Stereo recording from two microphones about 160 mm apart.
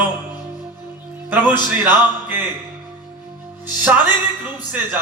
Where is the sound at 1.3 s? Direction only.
10° right (ahead or behind).